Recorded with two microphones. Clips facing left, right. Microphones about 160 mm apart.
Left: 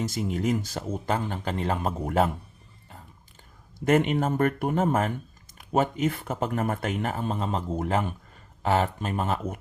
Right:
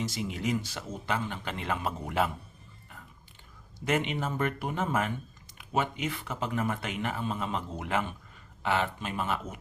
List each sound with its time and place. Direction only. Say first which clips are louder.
0.0 s speech: left 5 dB; 45° left (ahead or behind)
3.8 s speech: left 7 dB; 45° left (ahead or behind)